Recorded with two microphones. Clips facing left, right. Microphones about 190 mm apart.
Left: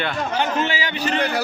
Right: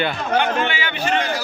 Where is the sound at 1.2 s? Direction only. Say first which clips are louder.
Left 2 dB; 60° left (ahead or behind).